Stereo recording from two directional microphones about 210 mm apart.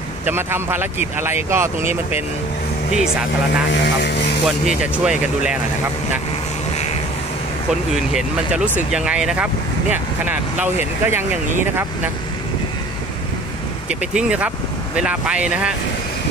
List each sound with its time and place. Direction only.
0.2 s speech: 10° right (ahead or behind)
3.0 s speech: 5° right (ahead or behind)
3.6 s speech: 55° left (ahead or behind)
4.6 s speech: 5° right (ahead or behind)
7.9 s speech: 5° right (ahead or behind)
13.8 s speech: 5° right (ahead or behind)